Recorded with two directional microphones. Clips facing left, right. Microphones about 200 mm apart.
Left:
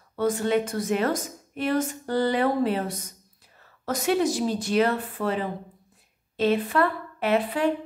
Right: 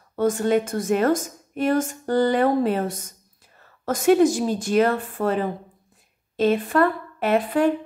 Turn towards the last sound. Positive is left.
turn(degrees=-45)  # may be behind; listen again after turning